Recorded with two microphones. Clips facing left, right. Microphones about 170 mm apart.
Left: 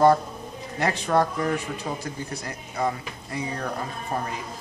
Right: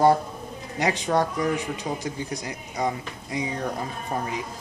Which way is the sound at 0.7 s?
15° right (ahead or behind).